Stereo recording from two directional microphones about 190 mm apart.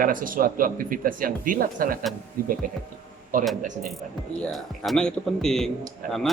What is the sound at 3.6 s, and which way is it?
Speech, 40° right (ahead or behind).